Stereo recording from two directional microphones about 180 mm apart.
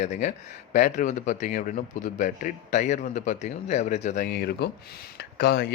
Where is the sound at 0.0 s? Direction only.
40° left (ahead or behind).